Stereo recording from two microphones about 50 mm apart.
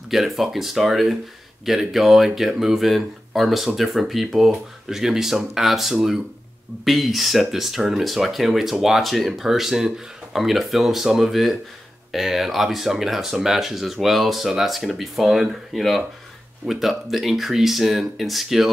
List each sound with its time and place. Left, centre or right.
0.1 s speech: centre